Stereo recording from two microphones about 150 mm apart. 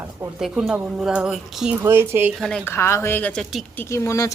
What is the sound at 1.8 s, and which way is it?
Speech, 15° right (ahead or behind).